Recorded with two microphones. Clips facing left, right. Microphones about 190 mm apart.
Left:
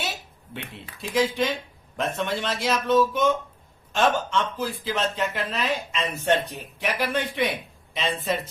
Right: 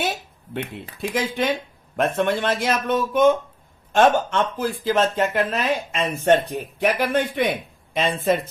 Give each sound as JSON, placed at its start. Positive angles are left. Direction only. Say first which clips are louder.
{"t": 0.0, "sound": "speech", "louder": "right 7 dB", "side_deg": -50}